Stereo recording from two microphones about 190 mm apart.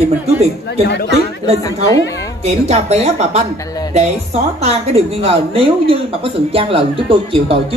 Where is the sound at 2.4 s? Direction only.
35° right (ahead or behind).